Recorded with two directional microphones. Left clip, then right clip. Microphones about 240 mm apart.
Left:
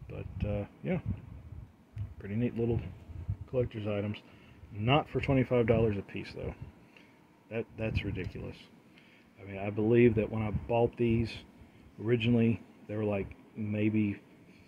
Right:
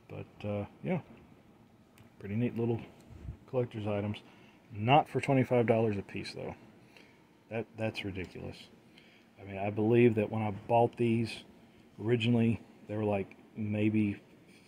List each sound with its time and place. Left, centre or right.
0.1 s speech: centre
2.2 s speech: centre